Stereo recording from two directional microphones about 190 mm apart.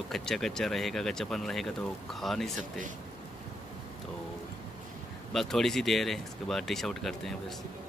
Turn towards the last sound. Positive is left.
turn(degrees=0)  # may be behind; listen again after turning